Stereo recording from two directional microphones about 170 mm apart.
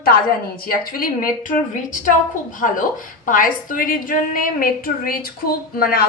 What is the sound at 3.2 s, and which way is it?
A woman's voice, 55° left (ahead or behind).